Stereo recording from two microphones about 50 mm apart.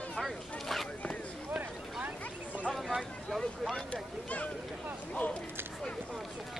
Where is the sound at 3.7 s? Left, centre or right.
Left.